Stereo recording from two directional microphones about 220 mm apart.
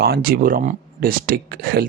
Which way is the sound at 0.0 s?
45° right (ahead or behind).